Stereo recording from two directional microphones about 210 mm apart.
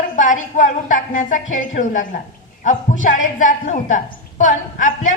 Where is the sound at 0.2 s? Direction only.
40° left (ahead or behind).